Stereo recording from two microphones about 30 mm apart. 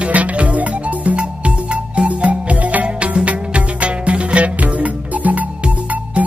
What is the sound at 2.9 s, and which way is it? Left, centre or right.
Music, right.